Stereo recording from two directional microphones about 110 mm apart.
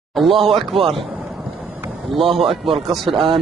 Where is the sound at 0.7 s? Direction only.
55° right (ahead or behind).